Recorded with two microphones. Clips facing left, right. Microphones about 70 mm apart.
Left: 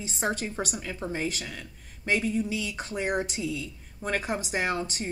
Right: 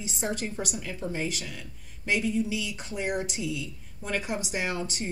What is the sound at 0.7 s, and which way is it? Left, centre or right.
A woman's voice, left.